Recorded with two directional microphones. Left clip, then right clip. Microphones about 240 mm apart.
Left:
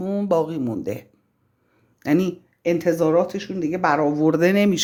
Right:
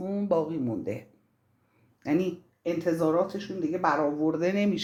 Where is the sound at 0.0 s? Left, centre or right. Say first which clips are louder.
Left 6 dB; left.